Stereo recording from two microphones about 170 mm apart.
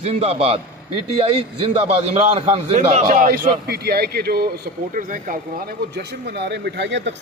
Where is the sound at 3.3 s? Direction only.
70° right (ahead or behind); by 7.1 s 90° right.